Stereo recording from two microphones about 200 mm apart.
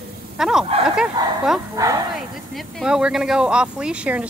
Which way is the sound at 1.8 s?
15° right (ahead or behind).